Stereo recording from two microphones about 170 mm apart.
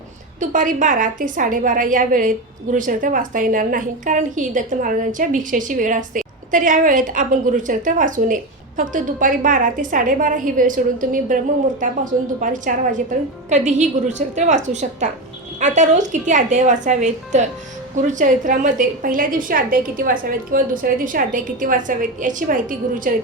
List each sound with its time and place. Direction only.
0.3 s a woman's voice: 50° right (ahead or behind)